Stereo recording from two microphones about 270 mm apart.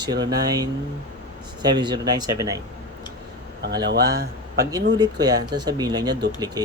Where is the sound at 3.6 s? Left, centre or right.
Right.